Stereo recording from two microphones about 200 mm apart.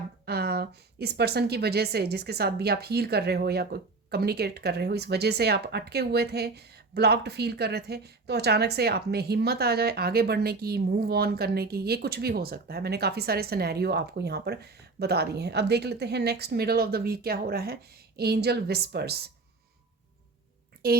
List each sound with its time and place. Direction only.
0.3 s a woman's voice: 55° right (ahead or behind)